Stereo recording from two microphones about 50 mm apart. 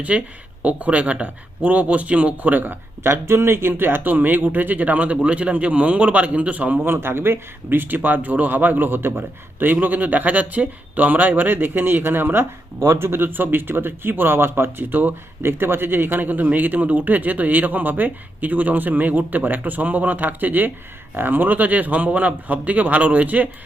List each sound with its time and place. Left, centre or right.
0.1 s speech: right
3.1 s speech: right
6.8 s speech: right
9.7 s speech: right